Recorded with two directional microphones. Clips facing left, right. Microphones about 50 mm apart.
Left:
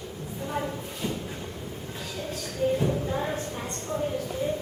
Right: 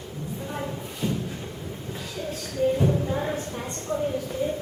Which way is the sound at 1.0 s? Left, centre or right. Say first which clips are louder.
Right 4 dB; centre.